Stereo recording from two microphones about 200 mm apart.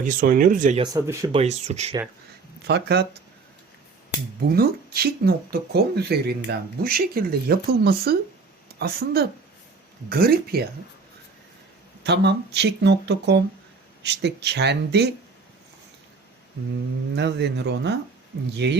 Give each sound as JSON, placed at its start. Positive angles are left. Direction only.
{"t": 0.0, "sound": "speech", "side_deg": -40}
{"t": 0.8, "sound": "speech", "side_deg": -15}
{"t": 1.3, "sound": "speech", "side_deg": -30}
{"t": 2.6, "sound": "speech", "side_deg": -55}
{"t": 4.4, "sound": "speech", "side_deg": -50}
{"t": 10.1, "sound": "speech", "side_deg": -50}
{"t": 12.0, "sound": "speech", "side_deg": -60}
{"t": 17.2, "sound": "speech", "side_deg": -60}